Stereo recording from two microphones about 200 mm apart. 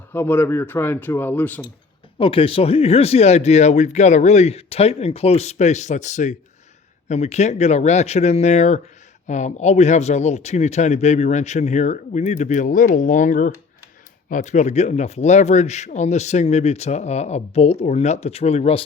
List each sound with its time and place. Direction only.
0.1 s speech: 10° left (ahead or behind)
2.1 s speech: 25° left (ahead or behind)